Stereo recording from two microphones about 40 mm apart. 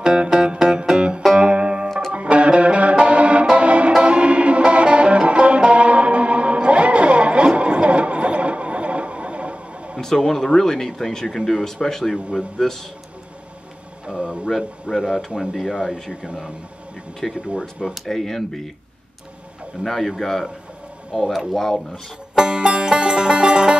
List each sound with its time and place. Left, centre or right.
0.0 s music: right
1.9 s music: centre
2.1 s music: right
9.9 s a man's voice: centre
14.0 s a sound: right
14.9 s speech: centre
15.9 s speech: centre
17.2 s a man's voice: centre
17.6 s speech: centre
18.0 s a man's voice: centre
19.8 s a man's voice: centre
22.4 s music: right